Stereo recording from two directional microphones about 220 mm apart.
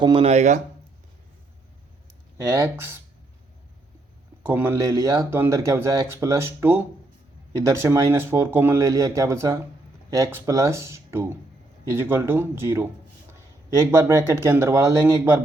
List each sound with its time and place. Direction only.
0.0 s speech: 25° right (ahead or behind)
2.4 s speech: 15° right (ahead or behind)
4.4 s speech: 10° right (ahead or behind)